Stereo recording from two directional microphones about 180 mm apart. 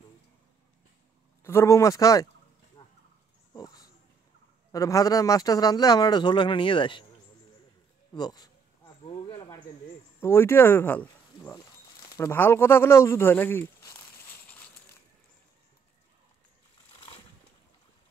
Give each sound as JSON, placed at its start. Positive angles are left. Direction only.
{"t": 1.4, "sound": "speech", "side_deg": 15}
{"t": 2.8, "sound": "a sound", "side_deg": 25}
{"t": 3.5, "sound": "dog", "side_deg": 20}
{"t": 4.7, "sound": "speech", "side_deg": 20}
{"t": 8.1, "sound": "a sound", "side_deg": 20}
{"t": 10.2, "sound": "speech", "side_deg": 15}
{"t": 16.9, "sound": "vehicle", "side_deg": 30}